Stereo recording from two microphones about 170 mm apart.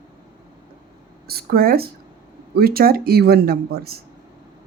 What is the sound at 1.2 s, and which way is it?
Speech, 65° right (ahead or behind).